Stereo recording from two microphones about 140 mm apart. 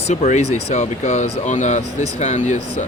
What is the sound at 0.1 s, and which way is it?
Speech, 55° left (ahead or behind).